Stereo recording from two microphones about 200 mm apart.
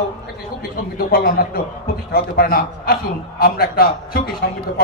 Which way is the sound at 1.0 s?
50° left (ahead or behind).